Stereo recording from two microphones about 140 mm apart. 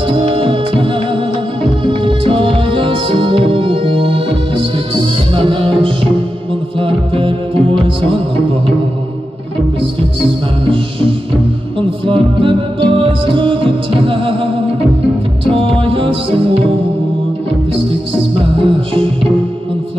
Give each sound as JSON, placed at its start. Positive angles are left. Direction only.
{"t": 0.1, "sound": "music", "side_deg": -40}
{"t": 10.2, "sound": "music", "side_deg": -40}